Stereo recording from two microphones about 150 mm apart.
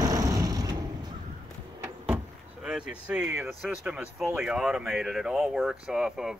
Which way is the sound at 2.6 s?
5° right (ahead or behind).